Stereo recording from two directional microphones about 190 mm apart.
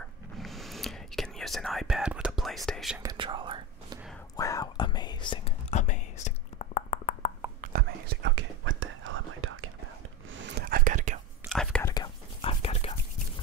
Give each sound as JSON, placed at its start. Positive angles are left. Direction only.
{"t": 0.4, "sound": "whispering", "side_deg": 0}
{"t": 3.0, "sound": "whispering", "side_deg": -20}
{"t": 4.4, "sound": "whispering", "side_deg": 20}
{"t": 5.7, "sound": "whispering", "side_deg": 40}
{"t": 7.6, "sound": "whispering", "side_deg": -55}
{"t": 10.3, "sound": "whispering", "side_deg": -70}
{"t": 10.6, "sound": "whispering", "side_deg": -45}
{"t": 11.4, "sound": "whispering", "side_deg": 0}
{"t": 11.8, "sound": "whispering", "side_deg": 20}